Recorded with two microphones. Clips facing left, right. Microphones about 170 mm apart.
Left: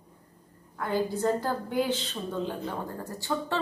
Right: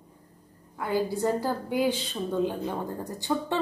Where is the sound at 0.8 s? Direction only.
10° right (ahead or behind).